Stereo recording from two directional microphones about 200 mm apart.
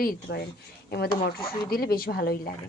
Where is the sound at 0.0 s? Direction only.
50° left (ahead or behind).